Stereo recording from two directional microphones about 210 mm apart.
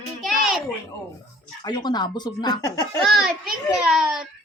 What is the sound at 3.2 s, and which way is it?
A child's voice, 5° right (ahead or behind).